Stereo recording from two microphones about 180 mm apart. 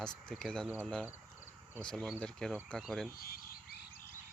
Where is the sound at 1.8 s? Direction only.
5° left (ahead or behind).